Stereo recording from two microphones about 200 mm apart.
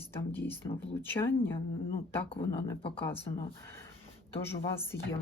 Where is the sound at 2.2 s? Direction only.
25° left (ahead or behind).